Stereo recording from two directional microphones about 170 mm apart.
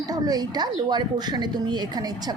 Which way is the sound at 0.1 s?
25° right (ahead or behind).